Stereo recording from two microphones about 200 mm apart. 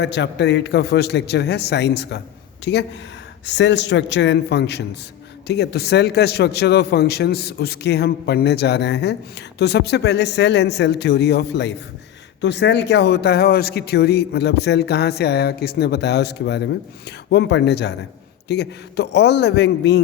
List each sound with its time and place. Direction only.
0.0 s speech: 60° left (ahead or behind)